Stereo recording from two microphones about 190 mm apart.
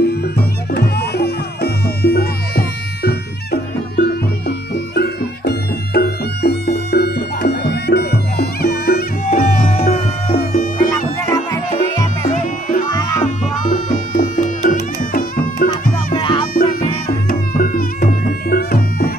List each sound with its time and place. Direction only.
0.0 s music: 60° left (ahead or behind)
11.3 s music: 20° left (ahead or behind)
12.3 s music: 45° left (ahead or behind)
16.2 s music: 25° left (ahead or behind)
17.3 s music: 50° left (ahead or behind)